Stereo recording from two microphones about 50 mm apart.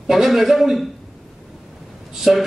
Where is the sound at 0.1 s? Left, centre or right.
Centre.